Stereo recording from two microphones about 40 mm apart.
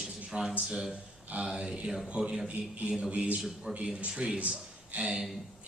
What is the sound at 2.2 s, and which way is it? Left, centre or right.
Speech, right.